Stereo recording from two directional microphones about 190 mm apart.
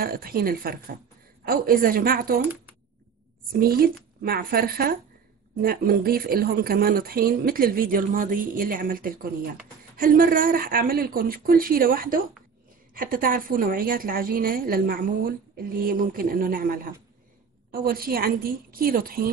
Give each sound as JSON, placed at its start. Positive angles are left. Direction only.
{"t": 0.0, "sound": "a woman's voice", "side_deg": -50}
{"t": 3.5, "sound": "a woman's voice", "side_deg": -50}